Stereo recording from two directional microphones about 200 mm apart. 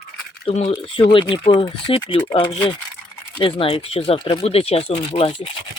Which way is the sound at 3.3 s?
25° left (ahead or behind).